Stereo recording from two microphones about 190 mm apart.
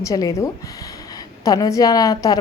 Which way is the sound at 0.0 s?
20° left (ahead or behind).